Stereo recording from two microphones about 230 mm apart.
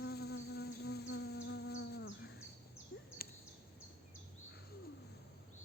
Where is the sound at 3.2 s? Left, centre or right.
Left.